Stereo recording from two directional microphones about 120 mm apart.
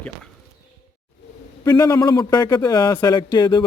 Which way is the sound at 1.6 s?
30° left (ahead or behind).